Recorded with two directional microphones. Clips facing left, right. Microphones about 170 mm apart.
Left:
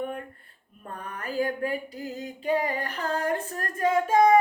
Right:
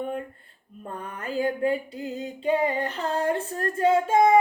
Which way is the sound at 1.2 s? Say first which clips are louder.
Right 3 dB; 25° right (ahead or behind).